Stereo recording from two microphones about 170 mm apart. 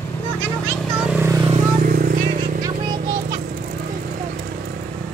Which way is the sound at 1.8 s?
60° right (ahead or behind).